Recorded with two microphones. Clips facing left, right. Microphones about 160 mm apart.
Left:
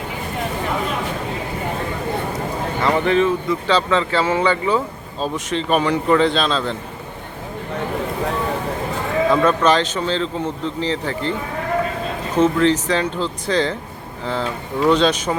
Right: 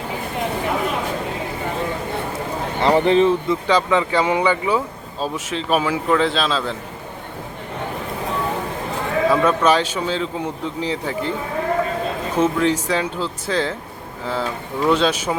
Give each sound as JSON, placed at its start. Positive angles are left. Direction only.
{"t": 2.8, "sound": "speech", "side_deg": -35}
{"t": 3.7, "sound": "a man's voice", "side_deg": -15}
{"t": 9.3, "sound": "speech", "side_deg": -10}
{"t": 12.4, "sound": "a man's voice", "side_deg": -10}